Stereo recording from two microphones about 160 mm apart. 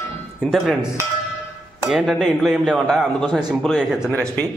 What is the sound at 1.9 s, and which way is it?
Speech, centre (ahead or behind).